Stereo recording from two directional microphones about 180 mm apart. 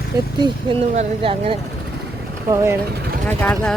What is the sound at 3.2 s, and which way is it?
Speech, 10° left (ahead or behind).